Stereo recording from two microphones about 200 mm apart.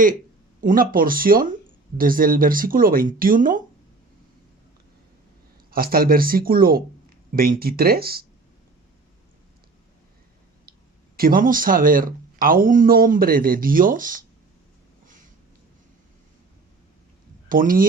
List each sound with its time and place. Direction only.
0.6 s speech: 45° right (ahead or behind)
5.7 s speech: 45° right (ahead or behind)
11.2 s speech: 45° right (ahead or behind)
17.5 s speech: 45° right (ahead or behind)